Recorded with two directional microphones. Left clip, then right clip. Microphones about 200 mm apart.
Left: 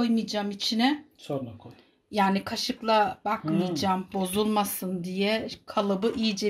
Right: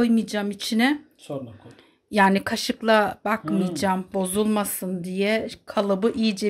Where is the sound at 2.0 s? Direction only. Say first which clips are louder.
Right 6 dB; 30° right (ahead or behind).